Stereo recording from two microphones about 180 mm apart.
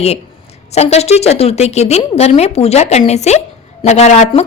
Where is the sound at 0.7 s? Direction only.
35° left (ahead or behind).